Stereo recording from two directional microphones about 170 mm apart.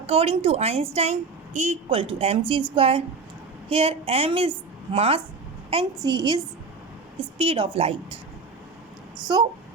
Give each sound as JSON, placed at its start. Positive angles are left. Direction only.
{"t": 0.0, "sound": "a woman's voice", "side_deg": -35}
{"t": 9.3, "sound": "a woman's voice", "side_deg": -30}